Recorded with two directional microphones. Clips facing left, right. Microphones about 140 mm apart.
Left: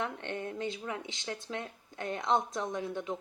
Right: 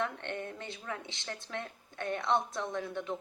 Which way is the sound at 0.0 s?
15° left (ahead or behind).